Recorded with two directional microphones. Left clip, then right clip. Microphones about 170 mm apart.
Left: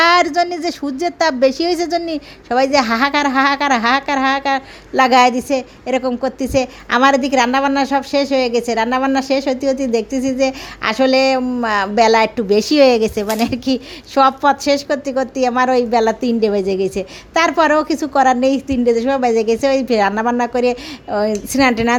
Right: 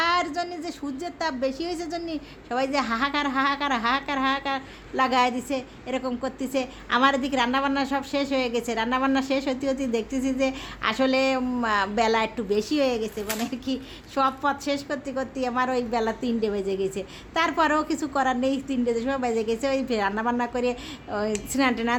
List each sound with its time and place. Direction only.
0.0 s a woman's voice: 40° left (ahead or behind)